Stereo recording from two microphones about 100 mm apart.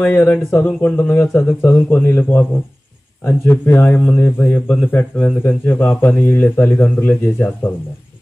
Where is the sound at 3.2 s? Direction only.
20° left (ahead or behind).